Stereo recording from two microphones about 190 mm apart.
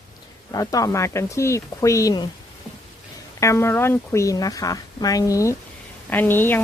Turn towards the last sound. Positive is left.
turn(degrees=10)  # may be behind; listen again after turning